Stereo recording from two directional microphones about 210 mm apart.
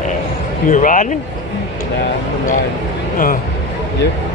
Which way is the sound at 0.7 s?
40° left (ahead or behind).